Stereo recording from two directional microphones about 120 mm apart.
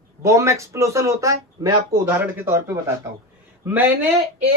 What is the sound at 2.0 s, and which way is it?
A man's voice, 15° right (ahead or behind).